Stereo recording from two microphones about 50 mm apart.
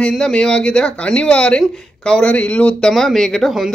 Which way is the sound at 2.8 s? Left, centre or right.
Centre.